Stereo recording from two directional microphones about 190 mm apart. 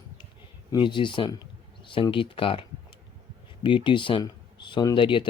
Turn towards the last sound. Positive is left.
turn(degrees=25)  # may be behind; listen again after turning